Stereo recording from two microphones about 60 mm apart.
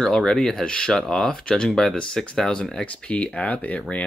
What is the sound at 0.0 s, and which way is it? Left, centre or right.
Speech, centre.